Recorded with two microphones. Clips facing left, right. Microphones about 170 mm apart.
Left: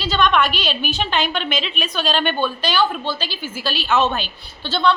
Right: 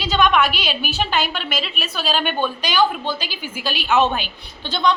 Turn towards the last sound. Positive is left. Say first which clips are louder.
# left 1 dB
turn(degrees=-15)  # may be behind; listen again after turning